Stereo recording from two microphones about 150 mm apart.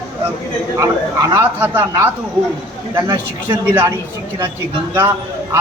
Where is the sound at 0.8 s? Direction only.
20° right (ahead or behind).